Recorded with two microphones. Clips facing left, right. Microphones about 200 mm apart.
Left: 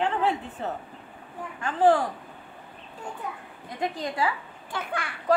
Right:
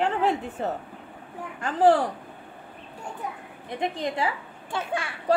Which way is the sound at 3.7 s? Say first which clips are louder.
Right 1 dB; 25° right (ahead or behind).